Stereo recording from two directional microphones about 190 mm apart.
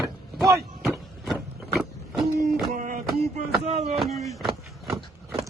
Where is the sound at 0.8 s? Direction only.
Centre (ahead or behind).